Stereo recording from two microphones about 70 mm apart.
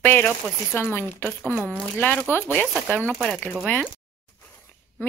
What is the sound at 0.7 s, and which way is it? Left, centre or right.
Speech, left.